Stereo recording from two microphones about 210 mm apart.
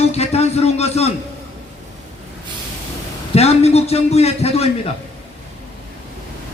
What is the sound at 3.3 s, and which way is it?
A man's voice, 30° left (ahead or behind).